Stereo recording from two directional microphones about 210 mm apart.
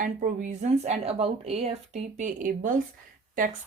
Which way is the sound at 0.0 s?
35° right (ahead or behind).